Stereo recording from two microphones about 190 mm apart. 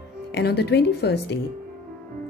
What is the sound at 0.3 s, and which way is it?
Speech, 60° left (ahead or behind).